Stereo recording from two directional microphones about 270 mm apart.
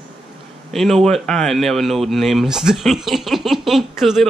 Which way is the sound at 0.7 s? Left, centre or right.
Centre.